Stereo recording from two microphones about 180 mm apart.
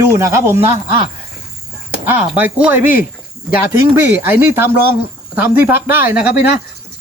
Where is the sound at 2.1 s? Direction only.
10° right (ahead or behind).